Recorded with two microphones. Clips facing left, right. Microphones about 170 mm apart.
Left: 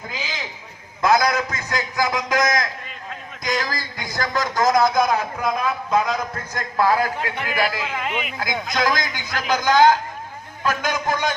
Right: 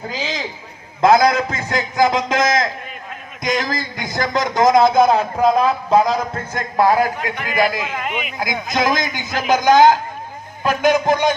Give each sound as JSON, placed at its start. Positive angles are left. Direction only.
{"t": 0.1, "sound": "a man's voice", "side_deg": -30}